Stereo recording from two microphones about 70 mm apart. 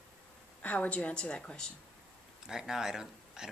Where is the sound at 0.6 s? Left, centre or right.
Centre.